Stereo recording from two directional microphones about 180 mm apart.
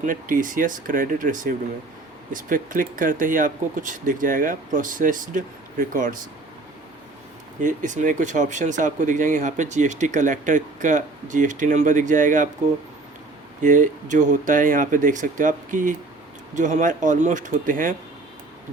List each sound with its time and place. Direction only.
0.0 s speech: 50° right (ahead or behind)
7.6 s speech: 45° right (ahead or behind)
13.6 s speech: 45° right (ahead or behind)